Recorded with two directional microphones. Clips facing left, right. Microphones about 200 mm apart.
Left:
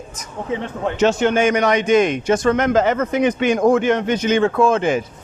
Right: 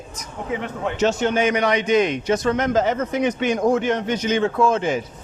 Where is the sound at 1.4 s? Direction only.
45° left (ahead or behind); by 3.7 s 90° left.